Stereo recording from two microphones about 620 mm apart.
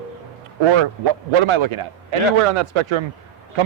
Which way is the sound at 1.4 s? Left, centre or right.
Right.